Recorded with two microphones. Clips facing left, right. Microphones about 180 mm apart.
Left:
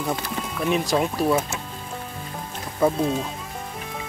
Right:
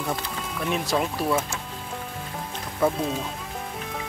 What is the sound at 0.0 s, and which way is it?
Speech, centre (ahead or behind).